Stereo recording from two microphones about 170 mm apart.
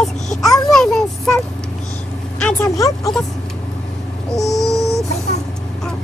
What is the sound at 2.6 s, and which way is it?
Music, 20° left (ahead or behind).